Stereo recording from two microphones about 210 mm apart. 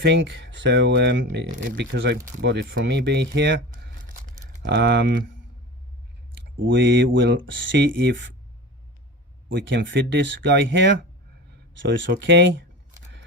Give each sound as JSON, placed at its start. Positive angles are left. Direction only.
{"t": 0.0, "sound": "speech", "side_deg": -55}
{"t": 4.6, "sound": "speech", "side_deg": -60}
{"t": 6.4, "sound": "speech", "side_deg": -60}
{"t": 9.5, "sound": "speech", "side_deg": -60}